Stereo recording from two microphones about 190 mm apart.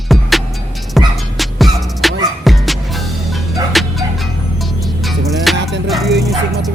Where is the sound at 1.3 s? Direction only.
Centre (ahead or behind).